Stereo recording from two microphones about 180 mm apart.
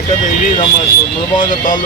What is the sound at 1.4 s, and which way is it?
Speech, 45° left (ahead or behind).